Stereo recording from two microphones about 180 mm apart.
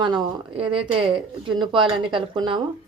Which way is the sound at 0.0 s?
25° right (ahead or behind).